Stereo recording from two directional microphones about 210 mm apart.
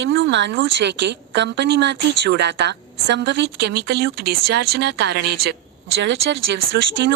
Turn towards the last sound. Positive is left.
turn(degrees=-60)  # may be behind; listen again after turning